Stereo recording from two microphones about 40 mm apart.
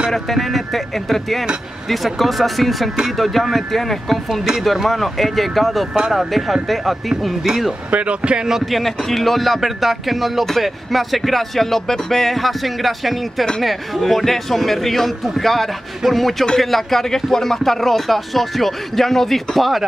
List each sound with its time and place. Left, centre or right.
0.1 s speech: centre
7.9 s speech: right
8.6 s speech: centre